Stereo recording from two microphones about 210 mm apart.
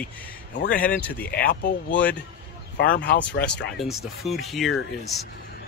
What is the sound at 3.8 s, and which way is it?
Speech, centre (ahead or behind).